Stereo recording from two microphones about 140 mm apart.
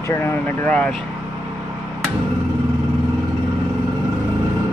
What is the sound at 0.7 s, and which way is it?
Mantra, 5° left (ahead or behind).